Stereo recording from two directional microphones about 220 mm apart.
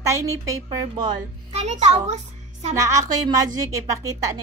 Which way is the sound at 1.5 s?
30° right (ahead or behind).